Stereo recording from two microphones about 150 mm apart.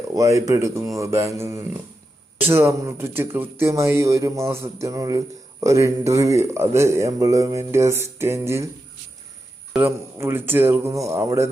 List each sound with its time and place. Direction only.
0.1 s speech: 20° right (ahead or behind)
9.7 s speech: 15° right (ahead or behind)